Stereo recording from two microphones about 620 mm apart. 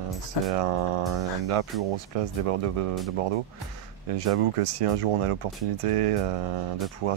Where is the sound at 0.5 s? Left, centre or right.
Right.